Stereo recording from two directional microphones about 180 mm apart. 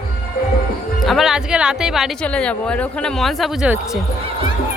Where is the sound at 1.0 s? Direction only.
Centre (ahead or behind).